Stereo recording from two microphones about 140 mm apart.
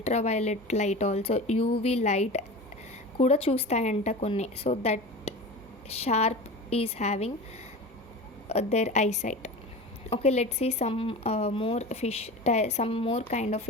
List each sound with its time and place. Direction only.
0.0 s speech: 50° left (ahead or behind)
8.4 s speech: 50° left (ahead or behind)